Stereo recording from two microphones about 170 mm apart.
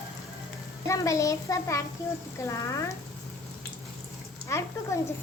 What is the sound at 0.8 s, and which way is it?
A child's voice, 20° left (ahead or behind).